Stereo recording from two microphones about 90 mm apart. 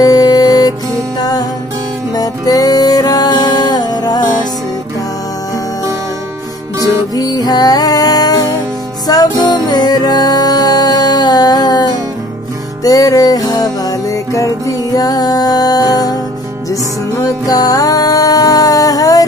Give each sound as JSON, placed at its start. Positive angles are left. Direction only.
{"t": 0.0, "sound": "music", "side_deg": 45}
{"t": 2.1, "sound": "music", "side_deg": 45}
{"t": 7.2, "sound": "music", "side_deg": 45}
{"t": 17.2, "sound": "music", "side_deg": 45}